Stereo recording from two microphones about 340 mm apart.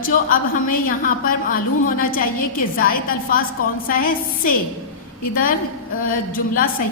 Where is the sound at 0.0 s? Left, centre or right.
Left.